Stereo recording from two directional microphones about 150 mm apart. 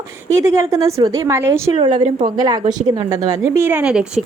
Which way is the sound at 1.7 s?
35° right (ahead or behind).